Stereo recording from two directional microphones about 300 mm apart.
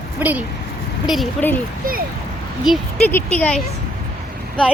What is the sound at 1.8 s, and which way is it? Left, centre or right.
Speech, right.